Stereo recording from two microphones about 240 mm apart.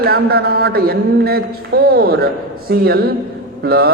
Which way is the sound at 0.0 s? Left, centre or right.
Right.